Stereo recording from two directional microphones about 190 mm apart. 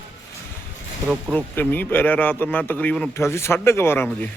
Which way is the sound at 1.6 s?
10° left (ahead or behind).